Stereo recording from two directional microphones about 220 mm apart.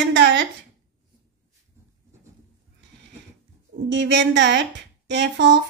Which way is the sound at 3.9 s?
55° right (ahead or behind).